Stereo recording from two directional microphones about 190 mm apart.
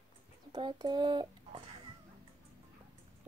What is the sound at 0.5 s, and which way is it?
Speech, 20° right (ahead or behind).